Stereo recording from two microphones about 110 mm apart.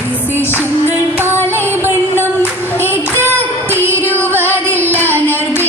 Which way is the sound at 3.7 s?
20° right (ahead or behind).